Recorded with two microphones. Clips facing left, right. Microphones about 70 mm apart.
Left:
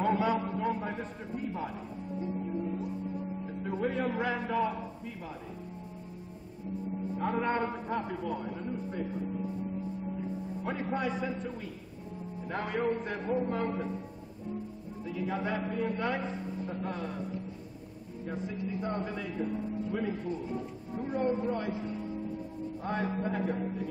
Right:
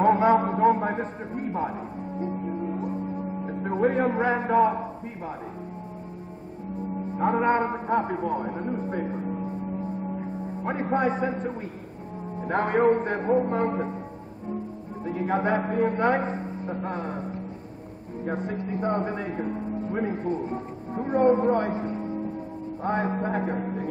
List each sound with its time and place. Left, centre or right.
0.0 s a sound: right
2.1 s music: right
7.2 s a man's voice: right
15.0 s a man's voice: right
18.2 s a man's voice: right